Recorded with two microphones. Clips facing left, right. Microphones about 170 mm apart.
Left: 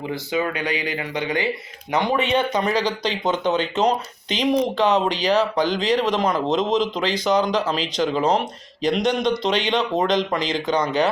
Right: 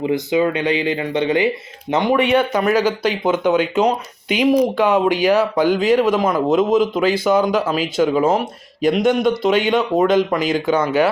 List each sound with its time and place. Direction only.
0.0 s speech: 20° right (ahead or behind)
2.6 s speech: 10° right (ahead or behind)